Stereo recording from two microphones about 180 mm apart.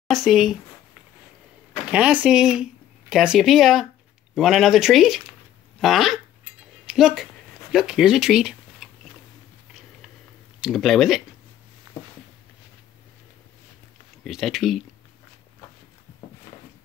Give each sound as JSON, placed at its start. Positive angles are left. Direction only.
{"t": 0.1, "sound": "speech", "side_deg": 0}
{"t": 1.7, "sound": "speech", "side_deg": -5}
{"t": 10.6, "sound": "speech", "side_deg": 0}
{"t": 14.2, "sound": "speech", "side_deg": 0}